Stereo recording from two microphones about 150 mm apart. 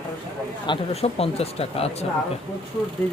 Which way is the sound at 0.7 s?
40° left (ahead or behind).